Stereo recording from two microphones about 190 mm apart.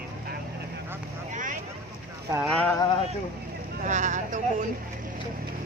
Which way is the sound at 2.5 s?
5° left (ahead or behind).